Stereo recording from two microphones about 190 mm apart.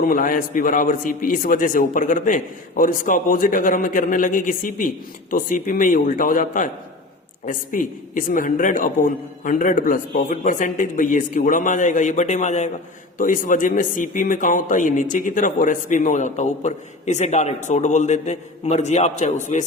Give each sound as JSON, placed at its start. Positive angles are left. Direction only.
{"t": 0.0, "sound": "a man's voice", "side_deg": 45}